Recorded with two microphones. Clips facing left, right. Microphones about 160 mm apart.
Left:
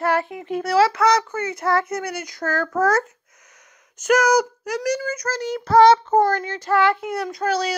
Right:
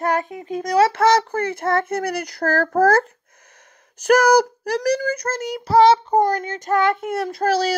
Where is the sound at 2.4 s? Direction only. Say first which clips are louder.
Right 4 dB; 35° right (ahead or behind).